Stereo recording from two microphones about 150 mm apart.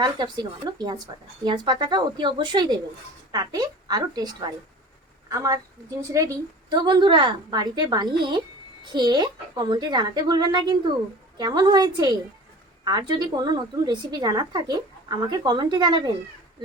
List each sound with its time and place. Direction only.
0.0 s a woman's voice: 30° right (ahead or behind)